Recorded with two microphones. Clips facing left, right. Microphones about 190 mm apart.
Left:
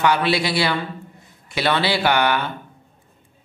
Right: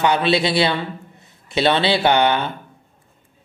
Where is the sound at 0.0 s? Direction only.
20° right (ahead or behind).